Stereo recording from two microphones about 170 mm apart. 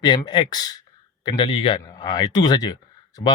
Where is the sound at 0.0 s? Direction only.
25° left (ahead or behind).